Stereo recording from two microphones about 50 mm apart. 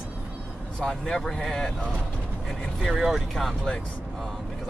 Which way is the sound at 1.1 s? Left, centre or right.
Centre.